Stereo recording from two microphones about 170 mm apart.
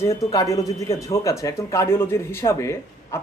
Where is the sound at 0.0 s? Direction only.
20° left (ahead or behind).